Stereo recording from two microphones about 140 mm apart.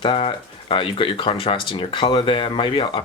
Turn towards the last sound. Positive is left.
turn(degrees=40)  # may be behind; listen again after turning